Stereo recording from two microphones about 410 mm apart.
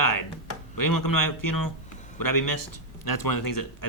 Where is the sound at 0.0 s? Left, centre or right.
Left.